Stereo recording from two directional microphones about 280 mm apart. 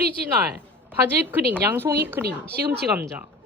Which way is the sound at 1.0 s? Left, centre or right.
Centre.